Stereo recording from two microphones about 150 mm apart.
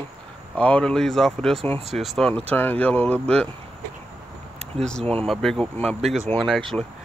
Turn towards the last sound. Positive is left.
turn(degrees=0)  # may be behind; listen again after turning